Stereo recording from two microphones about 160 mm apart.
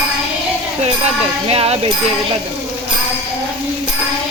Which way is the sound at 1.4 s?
35° right (ahead or behind).